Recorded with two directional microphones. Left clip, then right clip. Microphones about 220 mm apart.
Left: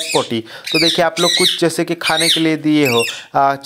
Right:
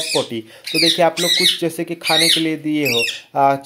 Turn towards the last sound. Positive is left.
turn(degrees=15)  # may be behind; listen again after turning